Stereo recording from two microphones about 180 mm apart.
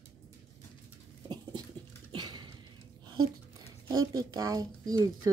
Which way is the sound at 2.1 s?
25° right (ahead or behind).